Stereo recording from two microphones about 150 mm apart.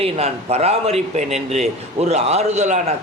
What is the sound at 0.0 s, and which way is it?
A man's voice, 45° right (ahead or behind).